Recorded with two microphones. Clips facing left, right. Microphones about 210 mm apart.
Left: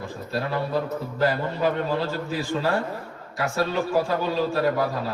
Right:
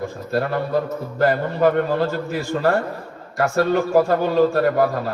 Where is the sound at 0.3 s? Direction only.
55° right (ahead or behind).